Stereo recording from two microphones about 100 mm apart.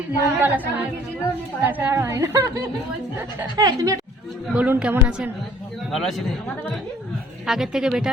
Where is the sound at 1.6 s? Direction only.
20° right (ahead or behind).